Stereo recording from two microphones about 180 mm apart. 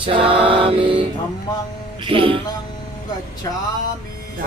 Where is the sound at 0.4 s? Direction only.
30° right (ahead or behind).